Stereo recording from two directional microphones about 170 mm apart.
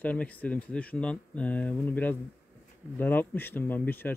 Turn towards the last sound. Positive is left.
turn(degrees=10)  # may be behind; listen again after turning